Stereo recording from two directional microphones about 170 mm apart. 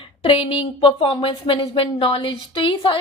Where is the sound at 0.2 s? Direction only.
30° left (ahead or behind).